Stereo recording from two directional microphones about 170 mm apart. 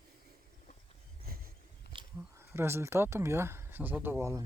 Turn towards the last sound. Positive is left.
turn(degrees=-15)  # may be behind; listen again after turning